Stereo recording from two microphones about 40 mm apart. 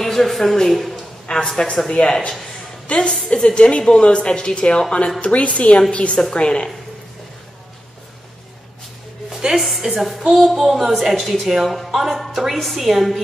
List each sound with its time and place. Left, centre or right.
0.0 s a woman's voice: centre
1.3 s a woman's voice: centre
9.3 s music: centre
9.6 s a woman's voice: centre